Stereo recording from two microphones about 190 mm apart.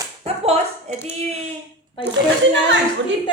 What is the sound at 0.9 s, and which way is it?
Speech, 35° right (ahead or behind).